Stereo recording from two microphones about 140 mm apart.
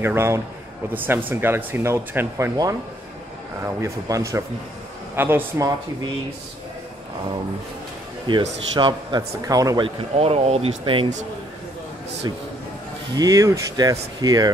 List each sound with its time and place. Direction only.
0.0 s speech: 15° right (ahead or behind)
8.3 s speech: 35° right (ahead or behind)
9.8 s speech: 45° right (ahead or behind)
13.1 s speech: 25° right (ahead or behind)